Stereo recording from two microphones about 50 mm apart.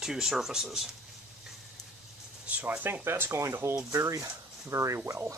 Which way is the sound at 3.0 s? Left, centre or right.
Right.